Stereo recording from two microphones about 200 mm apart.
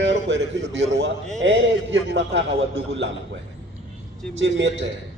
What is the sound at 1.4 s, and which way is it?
A man's voice, 65° right (ahead or behind).